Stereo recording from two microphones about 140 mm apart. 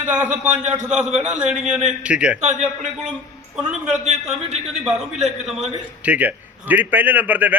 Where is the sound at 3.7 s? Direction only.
5° right (ahead or behind).